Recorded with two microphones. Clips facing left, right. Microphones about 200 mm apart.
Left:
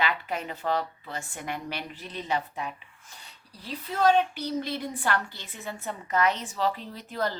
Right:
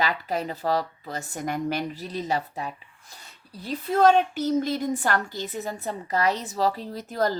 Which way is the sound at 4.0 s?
45° right (ahead or behind).